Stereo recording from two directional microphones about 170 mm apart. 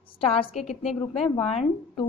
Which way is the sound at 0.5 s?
Centre (ahead or behind).